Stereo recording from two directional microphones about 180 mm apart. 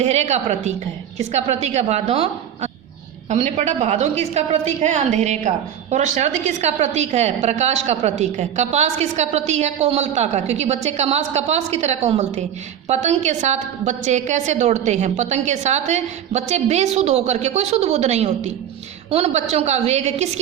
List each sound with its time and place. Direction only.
0.0 s a woman's voice: 40° right (ahead or behind)